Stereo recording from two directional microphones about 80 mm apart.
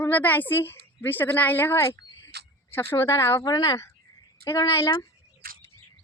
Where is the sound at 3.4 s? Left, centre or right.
Left.